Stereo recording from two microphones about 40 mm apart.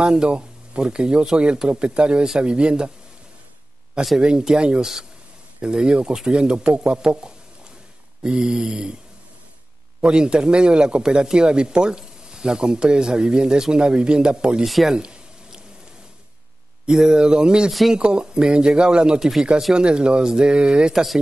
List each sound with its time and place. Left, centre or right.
0.0 s speech: centre
4.2 s speech: right
8.2 s speech: centre
10.0 s speech: right
15.0 s a sound: right
16.9 s speech: centre
17.6 s speech: centre
18.0 s speech: right
20.9 s speech: centre